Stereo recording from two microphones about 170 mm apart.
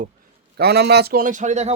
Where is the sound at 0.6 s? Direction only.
75° right (ahead or behind); by 1.7 s 45° right (ahead or behind).